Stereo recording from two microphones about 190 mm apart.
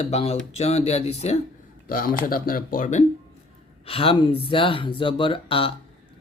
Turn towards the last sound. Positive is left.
turn(degrees=30)  # may be behind; listen again after turning